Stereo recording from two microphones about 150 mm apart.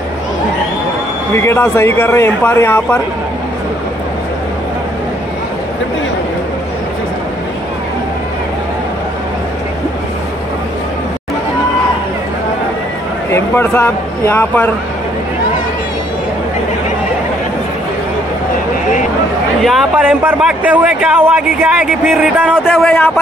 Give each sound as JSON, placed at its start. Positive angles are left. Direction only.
{"t": 1.3, "sound": "speech", "side_deg": 15}
{"t": 13.3, "sound": "speech", "side_deg": 15}
{"t": 19.6, "sound": "speech", "side_deg": 0}
{"t": 22.7, "sound": "speech", "side_deg": 5}